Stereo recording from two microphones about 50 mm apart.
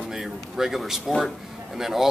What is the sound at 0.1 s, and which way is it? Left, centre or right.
Speech, centre.